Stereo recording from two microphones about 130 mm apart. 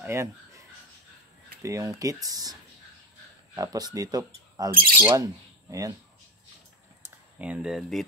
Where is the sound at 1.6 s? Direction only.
25° right (ahead or behind).